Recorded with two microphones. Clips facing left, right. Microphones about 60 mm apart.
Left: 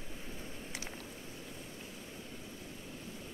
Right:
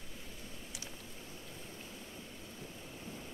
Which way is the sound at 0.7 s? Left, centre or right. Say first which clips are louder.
Left 5 dB; left.